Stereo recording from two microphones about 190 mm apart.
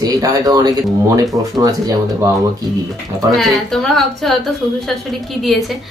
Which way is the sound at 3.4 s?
Centre (ahead or behind).